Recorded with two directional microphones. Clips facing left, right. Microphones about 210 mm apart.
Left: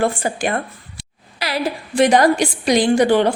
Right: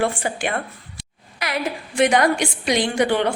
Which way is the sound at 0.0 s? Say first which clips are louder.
Left 3 dB; 40° left (ahead or behind).